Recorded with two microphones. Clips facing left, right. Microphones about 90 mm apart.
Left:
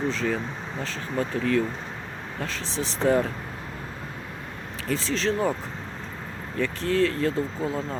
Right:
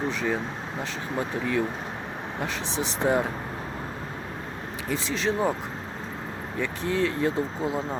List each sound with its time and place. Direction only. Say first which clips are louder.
0.1 s speech: left 1 dB; 15° right (ahead or behind)
4.9 s speech: left 2 dB; 15° right (ahead or behind)
6.6 s speech: left 3 dB; 15° right (ahead or behind)